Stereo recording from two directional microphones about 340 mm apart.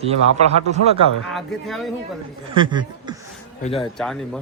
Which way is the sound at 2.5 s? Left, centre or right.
Centre.